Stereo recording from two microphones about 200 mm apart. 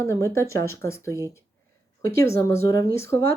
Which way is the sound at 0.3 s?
15° left (ahead or behind).